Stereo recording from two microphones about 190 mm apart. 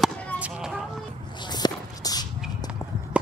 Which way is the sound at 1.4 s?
20° left (ahead or behind).